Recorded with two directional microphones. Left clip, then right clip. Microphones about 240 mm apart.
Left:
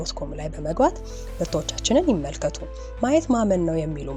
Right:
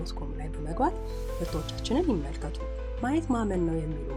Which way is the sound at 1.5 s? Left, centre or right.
Left.